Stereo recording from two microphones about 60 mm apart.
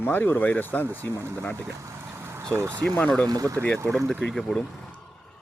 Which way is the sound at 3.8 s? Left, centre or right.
Centre.